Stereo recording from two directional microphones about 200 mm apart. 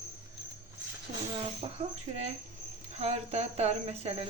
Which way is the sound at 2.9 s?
30° right (ahead or behind).